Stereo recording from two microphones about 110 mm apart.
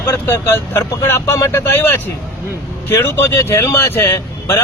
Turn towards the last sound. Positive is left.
turn(degrees=25)  # may be behind; listen again after turning